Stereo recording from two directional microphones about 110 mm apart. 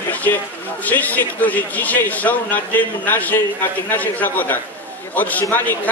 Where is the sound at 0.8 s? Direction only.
15° left (ahead or behind).